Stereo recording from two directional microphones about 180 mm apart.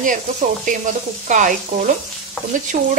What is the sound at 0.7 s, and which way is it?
Speech, 45° right (ahead or behind).